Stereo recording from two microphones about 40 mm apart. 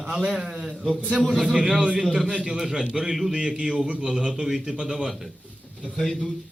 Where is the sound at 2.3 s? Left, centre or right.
Centre.